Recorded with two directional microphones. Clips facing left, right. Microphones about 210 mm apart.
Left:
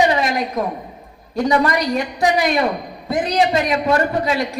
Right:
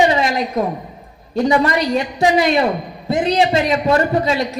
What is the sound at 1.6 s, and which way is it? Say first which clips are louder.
A woman's voice: right 2 dB; 25° right (ahead or behind).